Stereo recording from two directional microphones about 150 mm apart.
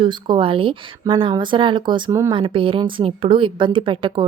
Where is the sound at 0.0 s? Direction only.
30° right (ahead or behind).